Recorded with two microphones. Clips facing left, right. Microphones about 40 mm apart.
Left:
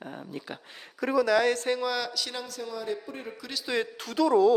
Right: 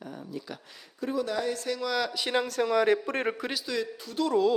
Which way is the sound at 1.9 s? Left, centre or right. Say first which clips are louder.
Right 1 dB; centre.